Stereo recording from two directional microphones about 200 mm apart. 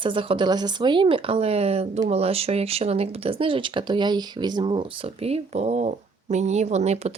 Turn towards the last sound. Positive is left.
turn(degrees=-35)  # may be behind; listen again after turning